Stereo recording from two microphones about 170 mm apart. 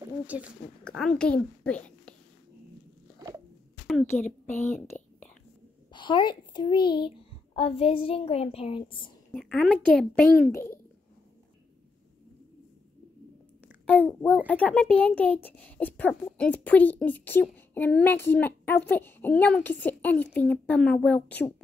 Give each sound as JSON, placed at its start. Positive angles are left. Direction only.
{"t": 0.3, "sound": "speech", "side_deg": -5}
{"t": 0.8, "sound": "a woman's voice", "side_deg": 5}
{"t": 3.8, "sound": "a sound", "side_deg": 10}
{"t": 4.5, "sound": "a woman's voice", "side_deg": 40}
{"t": 5.9, "sound": "a child's voice", "side_deg": 25}
{"t": 9.3, "sound": "a woman's voice", "side_deg": 5}
{"t": 10.5, "sound": "a woman's voice", "side_deg": 15}
{"t": 13.8, "sound": "a child's voice", "side_deg": 10}